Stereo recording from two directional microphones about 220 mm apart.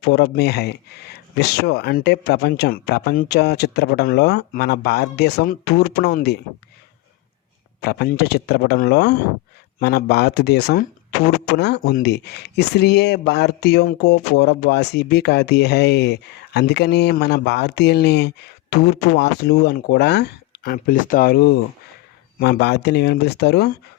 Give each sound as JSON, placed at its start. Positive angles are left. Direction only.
{"t": 0.1, "sound": "speech", "side_deg": 50}
{"t": 7.8, "sound": "speech", "side_deg": 50}